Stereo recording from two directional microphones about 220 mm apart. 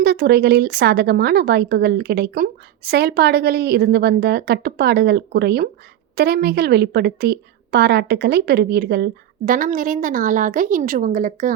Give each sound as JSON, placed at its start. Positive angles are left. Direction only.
{"t": 0.0, "sound": "a woman's voice", "side_deg": -45}